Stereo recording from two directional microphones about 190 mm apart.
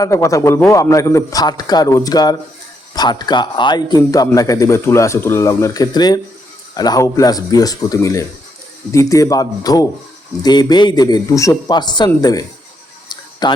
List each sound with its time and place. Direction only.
0.0 s a man's voice: 15° left (ahead or behind)